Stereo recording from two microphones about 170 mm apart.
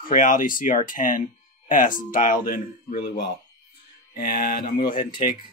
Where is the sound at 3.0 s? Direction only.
75° left (ahead or behind).